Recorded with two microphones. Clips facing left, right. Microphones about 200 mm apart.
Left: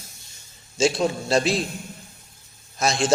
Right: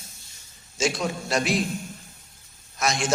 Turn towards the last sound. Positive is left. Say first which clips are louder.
# left 4 dB
turn(degrees=30)  # may be behind; listen again after turning